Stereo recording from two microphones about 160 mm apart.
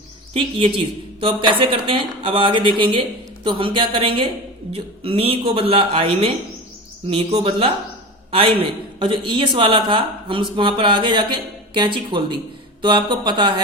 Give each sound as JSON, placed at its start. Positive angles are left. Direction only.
{"t": 0.3, "sound": "speech", "side_deg": -30}